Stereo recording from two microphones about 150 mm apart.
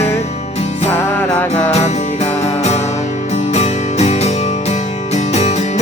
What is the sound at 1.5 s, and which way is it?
Music, 50° left (ahead or behind).